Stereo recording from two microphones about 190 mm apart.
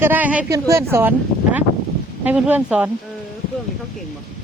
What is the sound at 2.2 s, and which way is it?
Speech, 5° right (ahead or behind).